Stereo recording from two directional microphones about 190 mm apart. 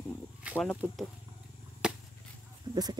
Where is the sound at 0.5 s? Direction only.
10° left (ahead or behind).